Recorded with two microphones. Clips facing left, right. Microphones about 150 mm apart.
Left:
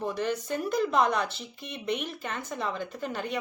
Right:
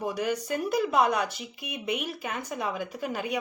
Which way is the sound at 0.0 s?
10° right (ahead or behind).